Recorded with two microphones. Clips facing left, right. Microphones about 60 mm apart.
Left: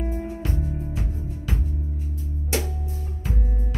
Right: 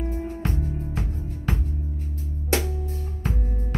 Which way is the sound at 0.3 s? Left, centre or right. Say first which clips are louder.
Even; right.